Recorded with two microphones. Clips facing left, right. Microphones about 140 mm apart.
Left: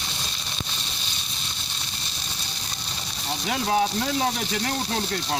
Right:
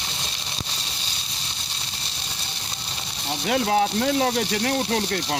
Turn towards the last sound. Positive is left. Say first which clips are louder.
# right 4 dB
turn(degrees=-60)  # may be behind; listen again after turning